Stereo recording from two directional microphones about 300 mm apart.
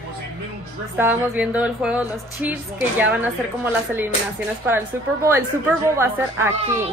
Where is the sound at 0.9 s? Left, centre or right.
Centre.